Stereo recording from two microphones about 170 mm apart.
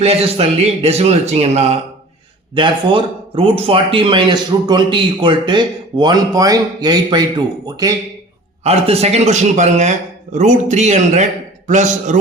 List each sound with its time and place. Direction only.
0.0 s speech: 35° right (ahead or behind)
8.6 s a man's voice: 35° right (ahead or behind)